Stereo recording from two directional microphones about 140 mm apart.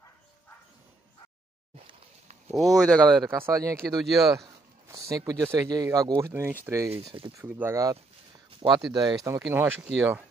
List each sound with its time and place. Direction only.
2.5 s speech: centre (ahead or behind)
3.3 s speech: 20° right (ahead or behind)
4.0 s speech: centre (ahead or behind)
4.3 s speech: 20° right (ahead or behind)
6.9 s speech: 45° right (ahead or behind)
7.3 s speech: 15° right (ahead or behind)